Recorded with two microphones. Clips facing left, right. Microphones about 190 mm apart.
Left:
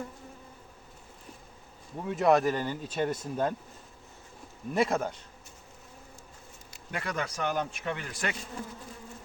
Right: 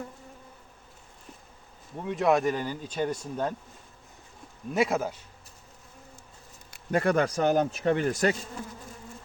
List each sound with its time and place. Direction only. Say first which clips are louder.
2.0 s speech: even; centre (ahead or behind)
4.7 s speech: right 1 dB; 5° right (ahead or behind)
6.9 s speech: right 10 dB; 50° right (ahead or behind)
7.4 s speech: right 6 dB; 35° right (ahead or behind)